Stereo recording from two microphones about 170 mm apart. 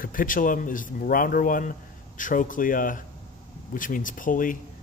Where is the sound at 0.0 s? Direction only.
55° left (ahead or behind).